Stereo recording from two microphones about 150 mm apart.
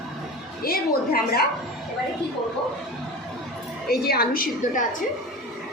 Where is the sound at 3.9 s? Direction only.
90° left; by 4.8 s 75° left (ahead or behind).